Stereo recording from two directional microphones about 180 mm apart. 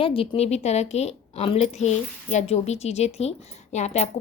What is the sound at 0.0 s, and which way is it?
A woman's voice, 30° left (ahead or behind).